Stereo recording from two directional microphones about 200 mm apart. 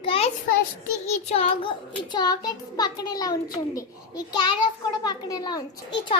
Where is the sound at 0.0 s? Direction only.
30° left (ahead or behind).